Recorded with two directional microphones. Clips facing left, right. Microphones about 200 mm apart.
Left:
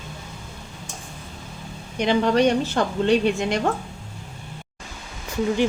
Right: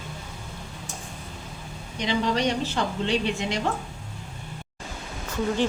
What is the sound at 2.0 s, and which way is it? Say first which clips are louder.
A woman's voice: left 6 dB; 55° left (ahead or behind).